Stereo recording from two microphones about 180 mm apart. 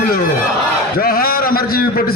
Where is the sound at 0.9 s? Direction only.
55° left (ahead or behind).